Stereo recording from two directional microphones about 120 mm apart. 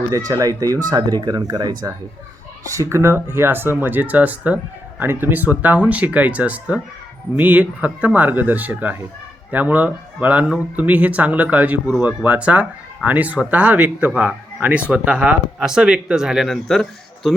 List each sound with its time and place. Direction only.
0.3 s speech: 30° right (ahead or behind); by 16.8 s centre (ahead or behind)